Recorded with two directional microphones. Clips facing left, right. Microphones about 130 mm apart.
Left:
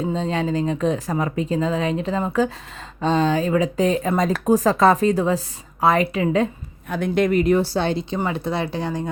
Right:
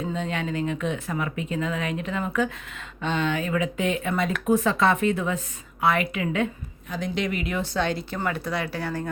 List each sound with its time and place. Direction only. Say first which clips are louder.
0.0 s speech: left 6 dB; 30° left (ahead or behind)
6.9 s speech: left 9 dB; 55° left (ahead or behind); by 9.0 s 20° left (ahead or behind)